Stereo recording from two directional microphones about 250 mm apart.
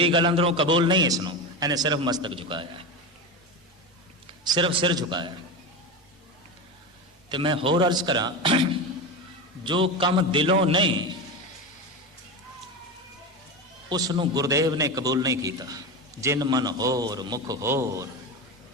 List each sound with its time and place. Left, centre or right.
0.0 s a man's voice: centre
4.4 s a man's voice: centre
7.3 s a man's voice: centre
9.6 s a man's voice: centre
13.9 s a man's voice: centre